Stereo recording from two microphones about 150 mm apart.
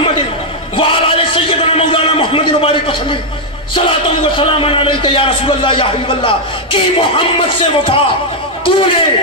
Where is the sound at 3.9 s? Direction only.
35° left (ahead or behind).